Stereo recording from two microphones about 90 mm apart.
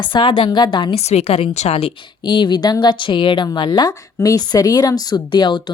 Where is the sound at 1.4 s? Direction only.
90° left.